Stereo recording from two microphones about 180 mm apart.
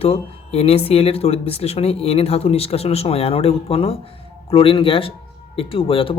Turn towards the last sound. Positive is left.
turn(degrees=30)  # may be behind; listen again after turning